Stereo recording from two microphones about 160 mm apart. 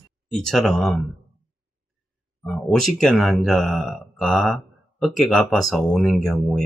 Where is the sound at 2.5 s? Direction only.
5° left (ahead or behind).